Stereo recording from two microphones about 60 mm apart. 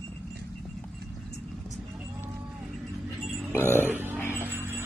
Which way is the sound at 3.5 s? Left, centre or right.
Left.